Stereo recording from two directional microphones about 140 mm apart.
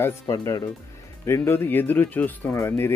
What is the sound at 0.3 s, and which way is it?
Speech, 25° left (ahead or behind).